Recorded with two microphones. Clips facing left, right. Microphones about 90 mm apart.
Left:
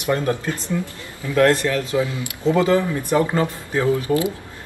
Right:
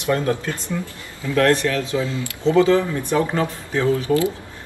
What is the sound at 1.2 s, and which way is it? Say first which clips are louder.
Speech: left 1 dB; 15° left (ahead or behind).